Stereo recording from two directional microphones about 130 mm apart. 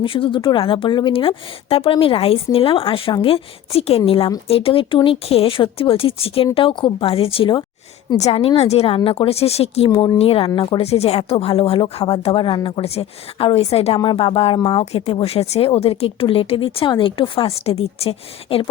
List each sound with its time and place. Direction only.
0.0 s speech: 40° left (ahead or behind)